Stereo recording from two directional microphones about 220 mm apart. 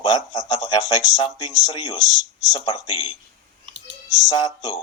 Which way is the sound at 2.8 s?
20° left (ahead or behind).